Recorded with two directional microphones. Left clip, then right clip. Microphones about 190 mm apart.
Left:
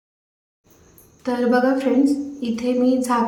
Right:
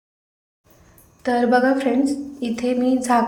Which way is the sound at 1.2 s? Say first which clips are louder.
Right 2 dB; 15° right (ahead or behind).